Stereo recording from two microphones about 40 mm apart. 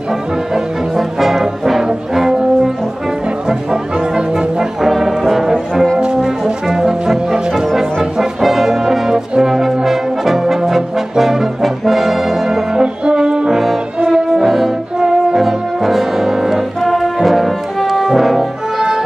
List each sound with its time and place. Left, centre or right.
0.9 s brass instrument: centre
3.4 s music: centre
4.8 s brass instrument: centre
5.9 s brass instrument: right
6.2 s music: centre
8.0 s brass instrument: centre
12.8 s brass instrument: right
13.5 s brass instrument: centre